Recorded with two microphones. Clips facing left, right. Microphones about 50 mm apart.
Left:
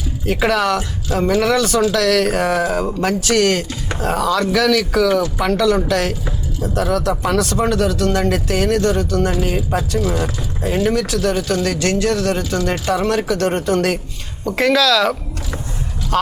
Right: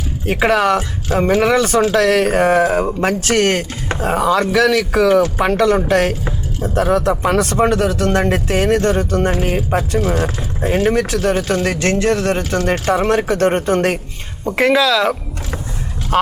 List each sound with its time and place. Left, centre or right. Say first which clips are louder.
0.3 s speech: right 2 dB; right
1.0 s speech: right 2 dB; right
3.2 s speech: left 2 dB; right
10.0 s speech: right 2 dB; right
16.1 s speech: right 3 dB; right